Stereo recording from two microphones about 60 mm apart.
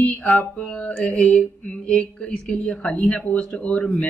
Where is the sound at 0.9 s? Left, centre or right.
Centre.